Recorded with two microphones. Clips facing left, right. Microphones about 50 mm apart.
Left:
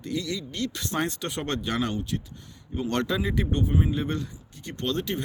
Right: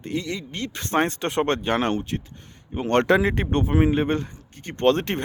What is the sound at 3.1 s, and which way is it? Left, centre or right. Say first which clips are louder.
Speech: right 7 dB; right.